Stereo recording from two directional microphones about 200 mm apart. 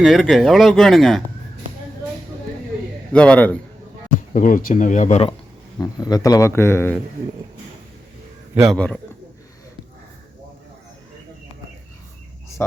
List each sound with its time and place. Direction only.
0.0 s speech: centre (ahead or behind)
3.1 s a man's voice: 5° left (ahead or behind)
4.4 s speech: 40° left (ahead or behind)
5.8 s a man's voice: 20° left (ahead or behind)
8.6 s speech: 5° left (ahead or behind)